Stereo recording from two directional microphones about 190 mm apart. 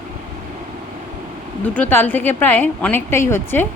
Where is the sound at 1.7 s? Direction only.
10° left (ahead or behind).